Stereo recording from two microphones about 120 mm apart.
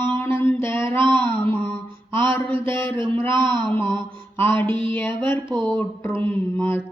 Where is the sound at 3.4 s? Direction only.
40° right (ahead or behind).